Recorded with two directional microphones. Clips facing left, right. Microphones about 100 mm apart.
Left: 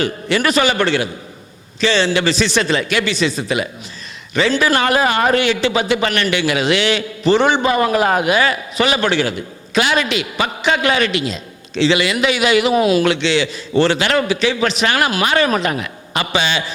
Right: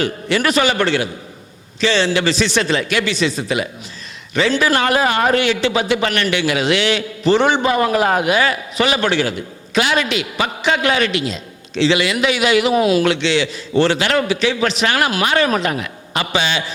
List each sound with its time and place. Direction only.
0.0 s a man's voice: 20° left (ahead or behind)